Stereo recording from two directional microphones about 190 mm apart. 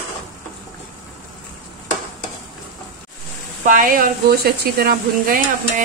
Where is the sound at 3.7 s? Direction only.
45° right (ahead or behind).